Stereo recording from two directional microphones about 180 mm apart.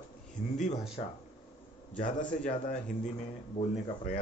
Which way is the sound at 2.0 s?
45° left (ahead or behind).